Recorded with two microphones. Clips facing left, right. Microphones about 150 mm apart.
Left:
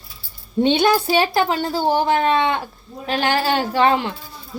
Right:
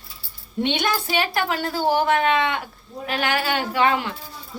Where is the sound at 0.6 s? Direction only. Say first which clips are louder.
Left 7 dB; 30° left (ahead or behind).